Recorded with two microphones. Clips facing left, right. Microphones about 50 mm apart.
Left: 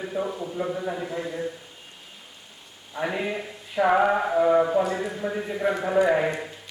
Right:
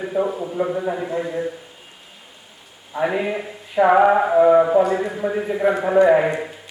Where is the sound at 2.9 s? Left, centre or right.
Centre.